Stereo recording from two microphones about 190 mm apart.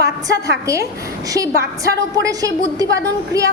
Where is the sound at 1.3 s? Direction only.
15° right (ahead or behind).